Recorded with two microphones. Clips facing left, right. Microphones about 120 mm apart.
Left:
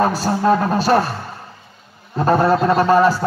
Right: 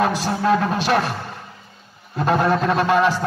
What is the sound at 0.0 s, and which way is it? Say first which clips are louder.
A man's voice: left 3 dB; 35° left (ahead or behind).